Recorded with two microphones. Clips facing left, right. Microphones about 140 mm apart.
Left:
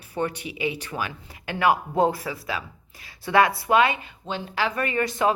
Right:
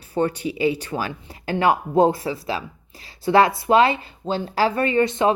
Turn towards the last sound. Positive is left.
turn(degrees=-25)  # may be behind; listen again after turning